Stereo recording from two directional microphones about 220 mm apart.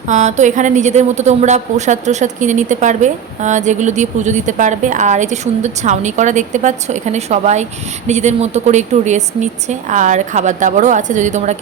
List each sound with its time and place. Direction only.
0.1 s a woman's voice: 30° right (ahead or behind)